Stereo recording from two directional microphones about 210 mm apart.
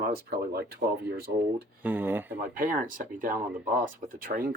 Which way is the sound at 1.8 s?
10° right (ahead or behind).